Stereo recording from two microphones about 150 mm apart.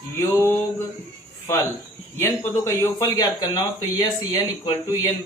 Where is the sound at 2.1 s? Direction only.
20° left (ahead or behind).